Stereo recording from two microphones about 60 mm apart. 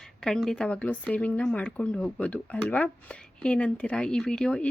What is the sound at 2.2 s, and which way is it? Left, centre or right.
Speech, left.